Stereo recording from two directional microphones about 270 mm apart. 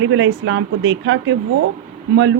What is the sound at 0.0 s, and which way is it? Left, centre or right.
A woman's voice, right.